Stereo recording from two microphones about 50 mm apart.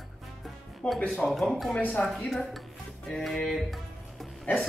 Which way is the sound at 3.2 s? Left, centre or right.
Centre.